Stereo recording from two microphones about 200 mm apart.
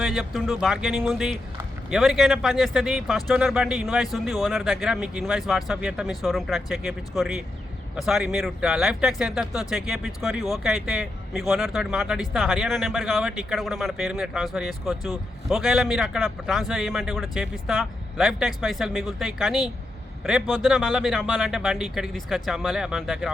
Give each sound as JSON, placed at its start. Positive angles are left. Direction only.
{"t": 0.0, "sound": "speech", "side_deg": 0}